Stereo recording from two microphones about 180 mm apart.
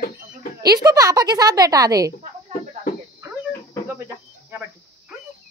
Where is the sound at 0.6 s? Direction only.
20° right (ahead or behind).